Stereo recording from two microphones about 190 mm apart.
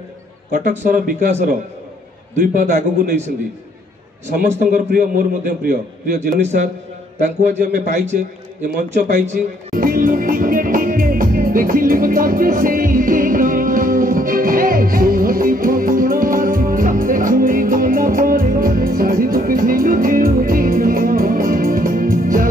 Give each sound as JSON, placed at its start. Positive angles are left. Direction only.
{"t": 0.5, "sound": "a man's voice", "side_deg": -45}
{"t": 4.4, "sound": "a man's voice", "side_deg": -45}
{"t": 7.8, "sound": "a man's voice", "side_deg": -40}
{"t": 8.9, "sound": "music", "side_deg": -40}